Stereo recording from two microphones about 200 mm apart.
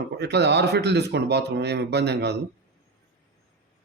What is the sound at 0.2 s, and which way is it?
Speech, 55° right (ahead or behind).